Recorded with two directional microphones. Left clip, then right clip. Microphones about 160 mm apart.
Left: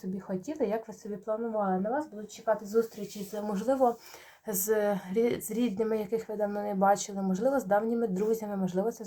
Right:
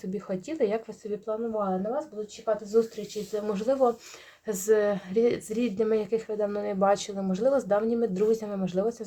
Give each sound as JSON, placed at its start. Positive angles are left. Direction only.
{"t": 0.3, "sound": "speech", "side_deg": -35}
{"t": 1.3, "sound": "a woman's voice", "side_deg": -25}
{"t": 3.4, "sound": "a woman's voice", "side_deg": -30}